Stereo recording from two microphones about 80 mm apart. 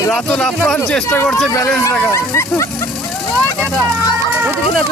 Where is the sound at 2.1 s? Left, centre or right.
Left.